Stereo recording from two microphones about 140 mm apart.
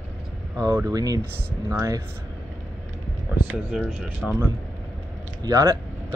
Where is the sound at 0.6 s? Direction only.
20° right (ahead or behind).